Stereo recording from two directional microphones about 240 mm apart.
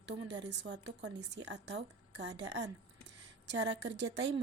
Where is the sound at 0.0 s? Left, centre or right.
Right.